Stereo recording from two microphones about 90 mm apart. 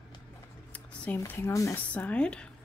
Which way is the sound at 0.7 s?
15° left (ahead or behind).